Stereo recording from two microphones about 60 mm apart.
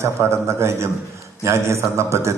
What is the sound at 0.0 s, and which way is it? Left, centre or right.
A man's voice, right.